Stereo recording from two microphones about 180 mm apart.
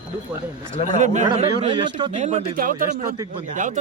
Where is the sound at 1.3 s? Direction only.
30° right (ahead or behind).